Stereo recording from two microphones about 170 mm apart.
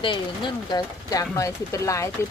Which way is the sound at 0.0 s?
30° left (ahead or behind).